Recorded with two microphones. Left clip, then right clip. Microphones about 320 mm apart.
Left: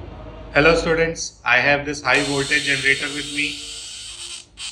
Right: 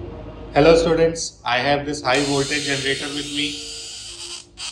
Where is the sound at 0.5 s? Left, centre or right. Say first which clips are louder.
Right 2 dB; left.